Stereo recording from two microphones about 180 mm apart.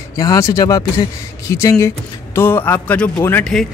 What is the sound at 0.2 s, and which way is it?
Speech, 20° left (ahead or behind).